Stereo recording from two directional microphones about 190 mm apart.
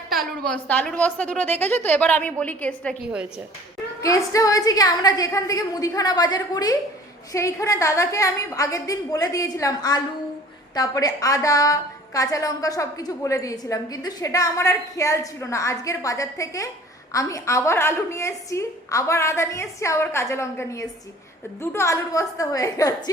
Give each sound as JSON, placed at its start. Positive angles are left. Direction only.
{"t": 0.2, "sound": "a woman's voice", "side_deg": 5}
{"t": 4.0, "sound": "a woman's voice", "side_deg": 15}